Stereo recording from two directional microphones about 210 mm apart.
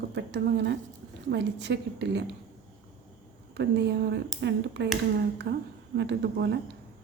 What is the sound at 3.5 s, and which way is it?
A woman's voice, 55° right (ahead or behind).